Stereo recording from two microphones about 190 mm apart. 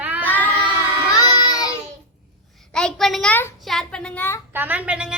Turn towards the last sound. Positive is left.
turn(degrees=-5)  # may be behind; listen again after turning